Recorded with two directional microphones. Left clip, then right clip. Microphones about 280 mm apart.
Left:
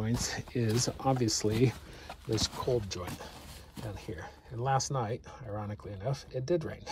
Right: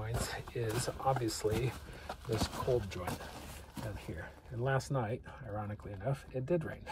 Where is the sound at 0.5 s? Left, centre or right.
Left.